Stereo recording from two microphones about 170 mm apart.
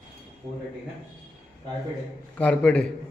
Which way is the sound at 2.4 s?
5° left (ahead or behind).